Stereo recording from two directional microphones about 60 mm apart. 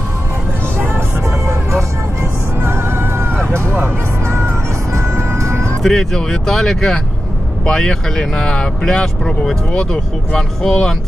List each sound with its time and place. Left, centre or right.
0.7 s vehicle: right
1.5 s music: right
2.6 s music: right
4.9 s music: right
5.8 s speech: centre